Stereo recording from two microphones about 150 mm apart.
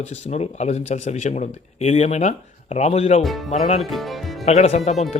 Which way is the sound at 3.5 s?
45° left (ahead or behind).